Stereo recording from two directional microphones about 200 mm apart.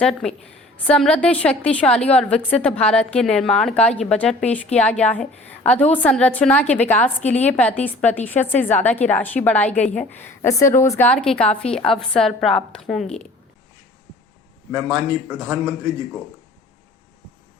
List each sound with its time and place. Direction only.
0.0 s a woman's voice: centre (ahead or behind)
7.2 s a woman's voice: 35° left (ahead or behind)
7.4 s a woman's voice: 10° left (ahead or behind)
14.8 s speech: 15° right (ahead or behind)